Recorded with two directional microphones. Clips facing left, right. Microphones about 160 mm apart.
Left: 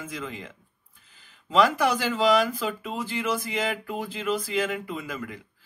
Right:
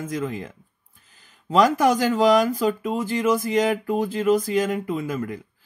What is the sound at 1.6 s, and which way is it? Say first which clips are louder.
Speech: right 4 dB; 45° right (ahead or behind).